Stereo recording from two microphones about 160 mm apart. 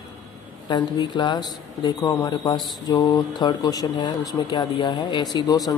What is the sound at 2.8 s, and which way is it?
Speech, 25° left (ahead or behind).